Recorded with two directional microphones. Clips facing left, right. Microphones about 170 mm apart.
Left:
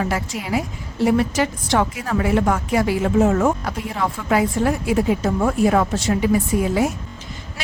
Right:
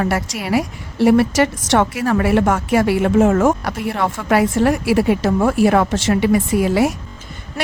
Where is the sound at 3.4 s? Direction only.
75° right (ahead or behind).